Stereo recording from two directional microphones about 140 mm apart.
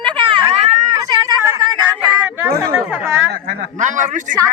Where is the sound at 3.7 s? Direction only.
65° right (ahead or behind).